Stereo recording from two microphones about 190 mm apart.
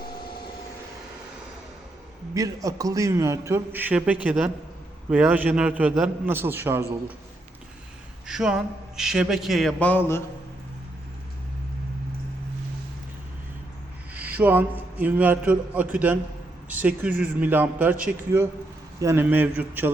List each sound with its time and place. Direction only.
2.3 s a man's voice: 20° right (ahead or behind)
8.3 s a man's voice: 5° right (ahead or behind)
14.1 s a man's voice: 10° right (ahead or behind)